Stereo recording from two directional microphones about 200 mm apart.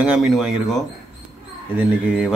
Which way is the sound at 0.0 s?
5° right (ahead or behind).